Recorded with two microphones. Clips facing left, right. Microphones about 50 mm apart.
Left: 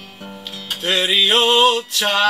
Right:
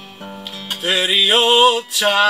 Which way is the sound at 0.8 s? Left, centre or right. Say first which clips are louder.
Even; centre.